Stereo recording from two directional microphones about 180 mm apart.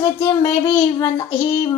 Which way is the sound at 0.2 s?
20° left (ahead or behind).